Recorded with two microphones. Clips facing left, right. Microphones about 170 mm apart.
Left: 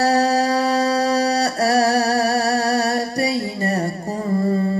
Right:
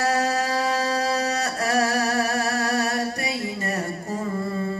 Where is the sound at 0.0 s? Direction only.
35° left (ahead or behind).